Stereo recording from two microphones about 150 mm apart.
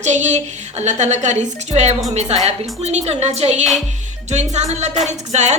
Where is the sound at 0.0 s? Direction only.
50° right (ahead or behind).